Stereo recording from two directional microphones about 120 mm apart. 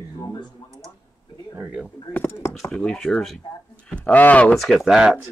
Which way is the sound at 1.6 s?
10° right (ahead or behind).